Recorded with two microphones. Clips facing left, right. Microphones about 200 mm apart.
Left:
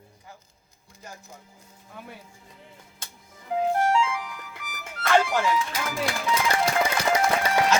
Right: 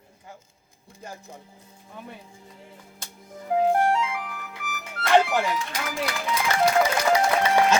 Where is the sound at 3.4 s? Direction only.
55° right (ahead or behind).